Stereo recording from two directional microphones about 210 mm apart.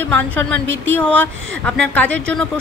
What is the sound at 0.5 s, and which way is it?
Speech, 60° right (ahead or behind).